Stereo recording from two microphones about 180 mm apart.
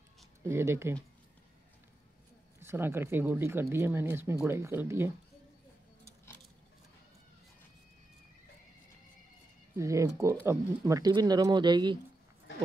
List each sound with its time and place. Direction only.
0.5 s speech: 15° right (ahead or behind)
2.6 s speech: 15° right (ahead or behind)
9.8 s speech: 15° right (ahead or behind)